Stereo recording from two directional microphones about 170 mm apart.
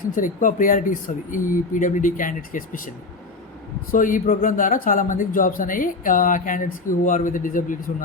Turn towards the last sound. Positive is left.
turn(degrees=50)  # may be behind; listen again after turning